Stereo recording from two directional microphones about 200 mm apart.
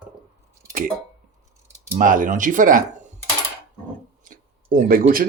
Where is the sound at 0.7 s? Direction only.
45° right (ahead or behind).